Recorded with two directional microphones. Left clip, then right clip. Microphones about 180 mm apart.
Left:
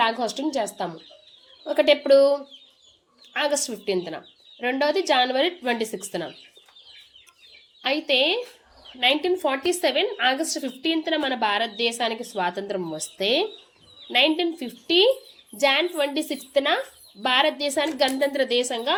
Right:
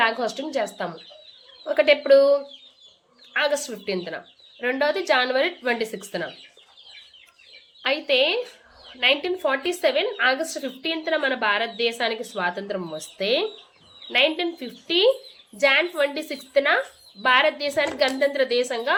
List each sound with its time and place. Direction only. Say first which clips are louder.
0.0 s speech: even; 35° left (ahead or behind)
7.8 s speech: right 1 dB; 40° left (ahead or behind)